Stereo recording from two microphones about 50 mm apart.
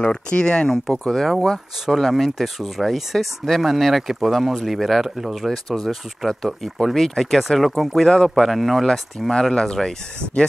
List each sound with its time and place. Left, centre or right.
0.0 s speech: centre
1.0 s speech: centre
5.7 s speech: centre
9.3 s speech: centre